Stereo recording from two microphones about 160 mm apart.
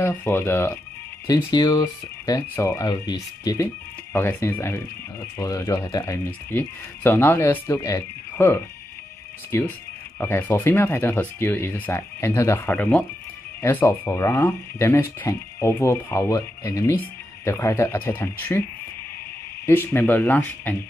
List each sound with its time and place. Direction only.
0.0 s speech: 10° left (ahead or behind)
1.2 s speech: 25° left (ahead or behind)
4.1 s speech: 15° left (ahead or behind)
19.6 s speech: 15° left (ahead or behind)